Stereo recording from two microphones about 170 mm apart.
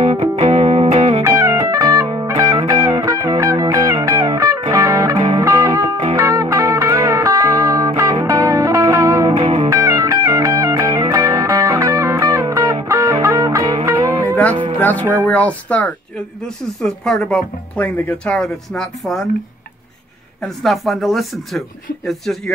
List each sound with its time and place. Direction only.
0.0 s music: 35° right (ahead or behind)
1.2 s music: 20° right (ahead or behind)
14.2 s music: 10° left (ahead or behind)
15.2 s speech: 10° left (ahead or behind)
20.4 s speech: centre (ahead or behind)